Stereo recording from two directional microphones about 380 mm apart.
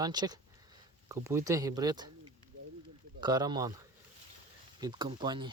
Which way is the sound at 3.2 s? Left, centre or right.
Centre.